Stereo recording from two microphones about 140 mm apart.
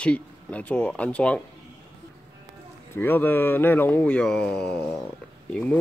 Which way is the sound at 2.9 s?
15° left (ahead or behind).